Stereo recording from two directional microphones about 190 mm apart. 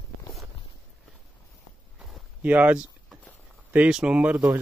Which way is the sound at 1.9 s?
Centre (ahead or behind).